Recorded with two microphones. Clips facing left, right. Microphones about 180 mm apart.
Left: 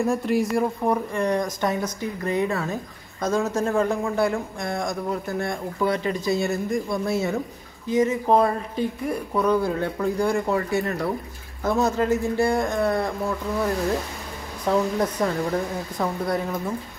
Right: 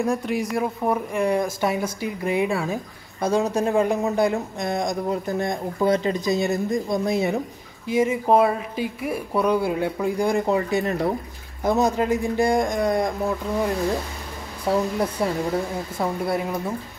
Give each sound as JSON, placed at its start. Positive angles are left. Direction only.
{"t": 0.0, "sound": "speech", "side_deg": 0}
{"t": 14.7, "sound": "speech", "side_deg": -10}